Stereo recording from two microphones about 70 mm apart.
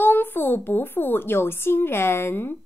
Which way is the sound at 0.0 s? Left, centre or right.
Left.